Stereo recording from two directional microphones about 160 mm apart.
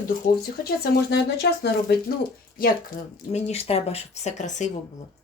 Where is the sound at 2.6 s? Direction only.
60° left (ahead or behind).